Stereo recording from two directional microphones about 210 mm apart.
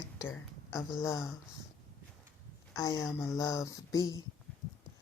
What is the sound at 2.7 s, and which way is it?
Speech, 15° left (ahead or behind).